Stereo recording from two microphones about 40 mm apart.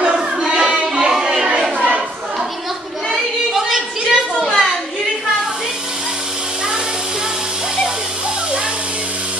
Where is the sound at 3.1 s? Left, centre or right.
Centre.